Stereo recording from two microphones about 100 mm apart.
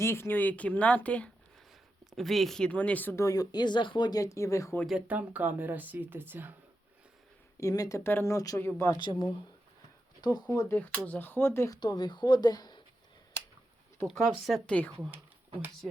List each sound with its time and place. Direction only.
0.0 s speech: 25° left (ahead or behind)
2.0 s speech: centre (ahead or behind); by 3.2 s 15° left (ahead or behind)
3.2 s speech: 35° left (ahead or behind)
4.9 s speech: 10° right (ahead or behind)
7.6 s speech: 35° left (ahead or behind)
9.0 s speech: 50° left (ahead or behind)
10.7 s speech: 15° left (ahead or behind)
11.8 s speech: 45° left (ahead or behind)
14.1 s speech: centre (ahead or behind)